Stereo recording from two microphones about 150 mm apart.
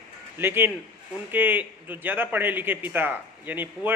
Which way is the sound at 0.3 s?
15° right (ahead or behind).